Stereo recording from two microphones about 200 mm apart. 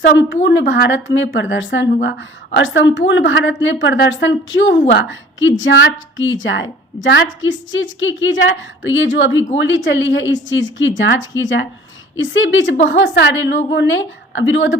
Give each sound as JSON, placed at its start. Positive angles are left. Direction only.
{"t": 0.0, "sound": "a woman's voice", "side_deg": 60}
{"t": 12.8, "sound": "a woman's voice", "side_deg": 60}